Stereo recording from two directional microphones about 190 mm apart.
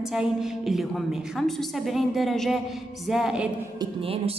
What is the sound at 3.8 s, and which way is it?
Speech, 30° right (ahead or behind).